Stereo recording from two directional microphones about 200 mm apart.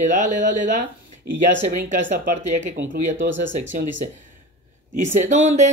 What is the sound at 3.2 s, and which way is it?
Speech, 65° right (ahead or behind).